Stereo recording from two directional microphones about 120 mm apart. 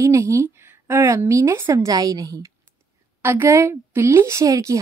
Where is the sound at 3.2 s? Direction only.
20° right (ahead or behind).